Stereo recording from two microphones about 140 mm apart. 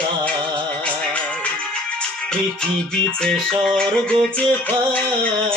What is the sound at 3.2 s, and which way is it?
Music, 5° left (ahead or behind).